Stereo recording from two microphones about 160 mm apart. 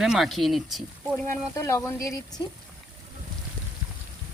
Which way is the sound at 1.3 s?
20° left (ahead or behind).